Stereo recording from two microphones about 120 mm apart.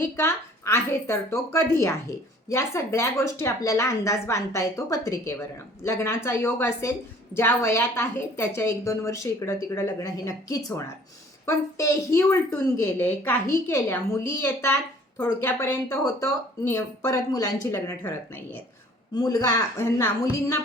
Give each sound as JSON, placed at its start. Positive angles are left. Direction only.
{"t": 0.0, "sound": "a woman's voice", "side_deg": 25}
{"t": 19.1, "sound": "a woman's voice", "side_deg": 30}